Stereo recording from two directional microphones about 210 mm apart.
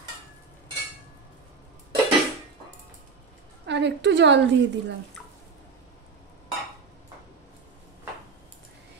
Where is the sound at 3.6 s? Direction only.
55° right (ahead or behind).